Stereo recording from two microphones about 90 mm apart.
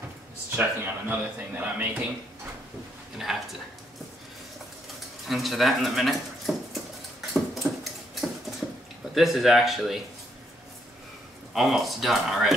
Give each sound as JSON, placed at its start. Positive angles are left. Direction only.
{"t": 0.6, "sound": "speech", "side_deg": -20}
{"t": 3.3, "sound": "speech", "side_deg": -5}
{"t": 5.3, "sound": "speech", "side_deg": 0}
{"t": 7.3, "sound": "a sound", "side_deg": 0}
{"t": 9.1, "sound": "speech", "side_deg": 0}
{"t": 11.5, "sound": "speech", "side_deg": 0}